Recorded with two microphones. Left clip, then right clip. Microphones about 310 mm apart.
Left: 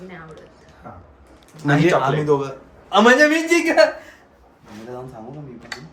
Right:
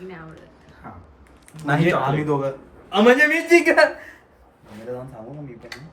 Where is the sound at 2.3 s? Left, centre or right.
Centre.